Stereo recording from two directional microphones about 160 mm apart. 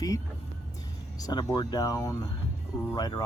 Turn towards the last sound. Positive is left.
turn(degrees=30)  # may be behind; listen again after turning